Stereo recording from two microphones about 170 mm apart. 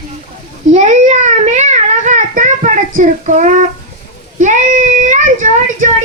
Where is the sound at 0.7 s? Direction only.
45° right (ahead or behind).